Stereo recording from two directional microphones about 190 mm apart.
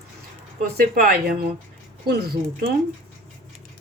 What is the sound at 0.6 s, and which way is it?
Speech, 55° right (ahead or behind).